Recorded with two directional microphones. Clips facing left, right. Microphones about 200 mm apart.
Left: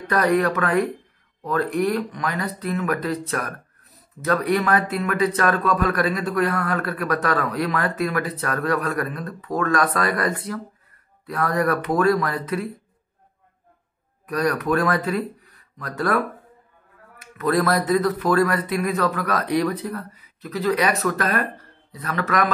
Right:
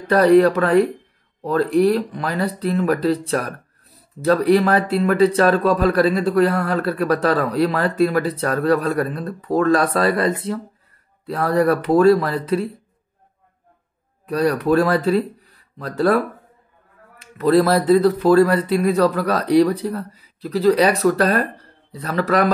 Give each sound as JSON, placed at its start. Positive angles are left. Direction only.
{"t": 0.0, "sound": "speech", "side_deg": -30}
{"t": 14.2, "sound": "speech", "side_deg": -30}